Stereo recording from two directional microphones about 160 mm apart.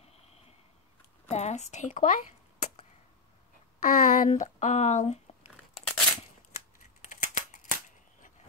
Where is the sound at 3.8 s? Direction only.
55° left (ahead or behind).